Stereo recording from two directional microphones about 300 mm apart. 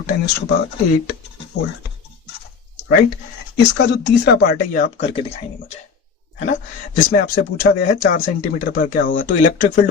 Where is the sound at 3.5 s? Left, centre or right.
Left.